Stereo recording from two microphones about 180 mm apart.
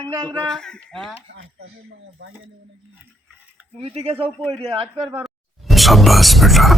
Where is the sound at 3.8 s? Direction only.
35° right (ahead or behind).